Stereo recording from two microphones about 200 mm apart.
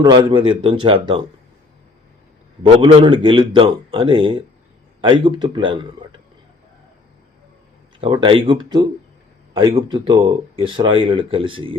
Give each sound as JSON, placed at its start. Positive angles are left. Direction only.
{"t": 0.0, "sound": "speech", "side_deg": -25}
{"t": 2.6, "sound": "speech", "side_deg": -25}
{"t": 8.0, "sound": "speech", "side_deg": -25}